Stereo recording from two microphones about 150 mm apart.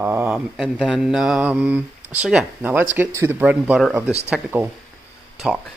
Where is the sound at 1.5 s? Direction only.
10° right (ahead or behind).